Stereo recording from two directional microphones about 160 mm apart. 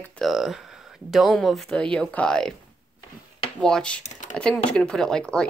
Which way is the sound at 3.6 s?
5° left (ahead or behind).